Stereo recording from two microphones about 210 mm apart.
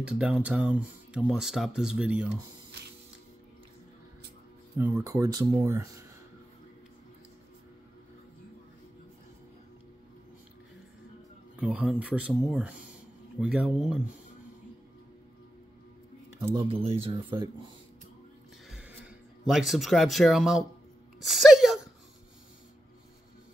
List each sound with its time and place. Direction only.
0.0 s speech: 5° right (ahead or behind)
4.7 s speech: 10° right (ahead or behind)
11.5 s speech: 5° right (ahead or behind)
16.3 s speech: 15° right (ahead or behind)
16.6 s speech: 25° right (ahead or behind)
18.7 s a sound: 5° right (ahead or behind)
19.7 s speech: centre (ahead or behind)
21.2 s a sound: centre (ahead or behind)